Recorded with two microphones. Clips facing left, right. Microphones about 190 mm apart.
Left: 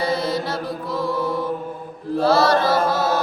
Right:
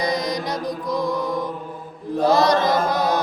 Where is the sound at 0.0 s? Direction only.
15° right (ahead or behind).